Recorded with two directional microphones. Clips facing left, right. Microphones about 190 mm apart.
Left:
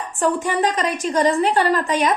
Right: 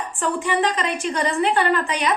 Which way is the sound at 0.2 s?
40° left (ahead or behind).